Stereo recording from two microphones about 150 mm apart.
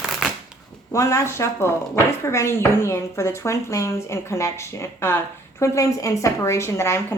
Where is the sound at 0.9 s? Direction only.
20° left (ahead or behind).